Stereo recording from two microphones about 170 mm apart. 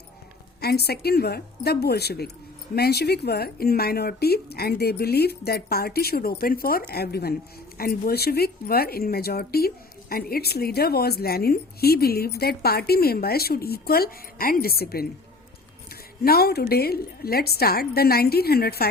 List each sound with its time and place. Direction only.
0.6 s speech: 65° left (ahead or behind)
16.2 s speech: 65° left (ahead or behind)